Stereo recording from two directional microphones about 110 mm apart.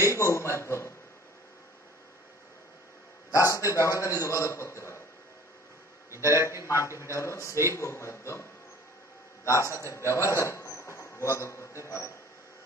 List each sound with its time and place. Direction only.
0.0 s a sound: 25° left (ahead or behind)
3.3 s a man's voice: 30° left (ahead or behind)
6.0 s a man's voice: 25° right (ahead or behind)
6.6 s a man's voice: 25° left (ahead or behind)